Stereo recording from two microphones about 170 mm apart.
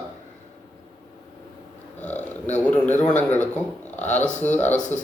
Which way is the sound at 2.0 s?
10° left (ahead or behind).